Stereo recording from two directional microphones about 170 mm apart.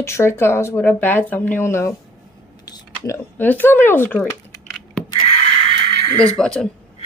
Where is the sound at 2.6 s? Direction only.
20° left (ahead or behind).